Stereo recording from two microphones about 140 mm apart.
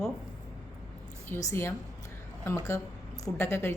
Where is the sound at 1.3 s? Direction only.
15° left (ahead or behind).